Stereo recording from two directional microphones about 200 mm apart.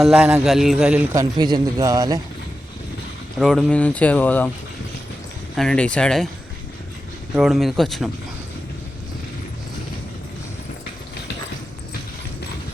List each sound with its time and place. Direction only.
0.0 s speech: 5° right (ahead or behind)
1.1 s a man's voice: 20° right (ahead or behind)
3.3 s speech: centre (ahead or behind)
5.5 s speech: 5° left (ahead or behind)
7.3 s speech: centre (ahead or behind)